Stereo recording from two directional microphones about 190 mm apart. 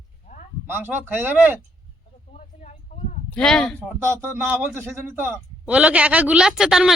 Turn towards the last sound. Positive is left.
turn(degrees=0)  # may be behind; listen again after turning